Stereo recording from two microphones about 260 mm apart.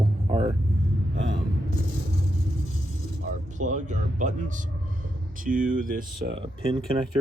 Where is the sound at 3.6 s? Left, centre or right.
Right.